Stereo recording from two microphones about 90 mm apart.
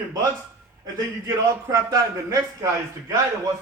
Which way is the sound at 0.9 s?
40° right (ahead or behind).